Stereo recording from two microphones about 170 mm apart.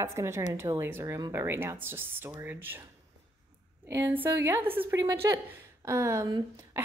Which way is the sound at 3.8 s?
15° right (ahead or behind).